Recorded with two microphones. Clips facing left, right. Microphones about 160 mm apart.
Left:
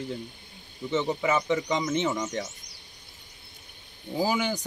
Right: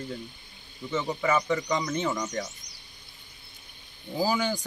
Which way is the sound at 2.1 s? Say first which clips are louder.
Left 1 dB; 5° left (ahead or behind).